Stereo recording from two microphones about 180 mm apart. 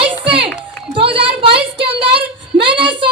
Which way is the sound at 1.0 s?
30° right (ahead or behind).